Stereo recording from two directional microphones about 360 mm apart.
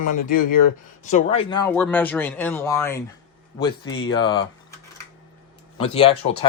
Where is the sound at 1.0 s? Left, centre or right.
Centre.